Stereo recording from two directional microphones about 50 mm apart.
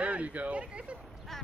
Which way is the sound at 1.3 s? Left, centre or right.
Centre.